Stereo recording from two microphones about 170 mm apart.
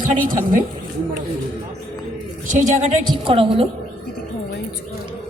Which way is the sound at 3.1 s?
30° right (ahead or behind).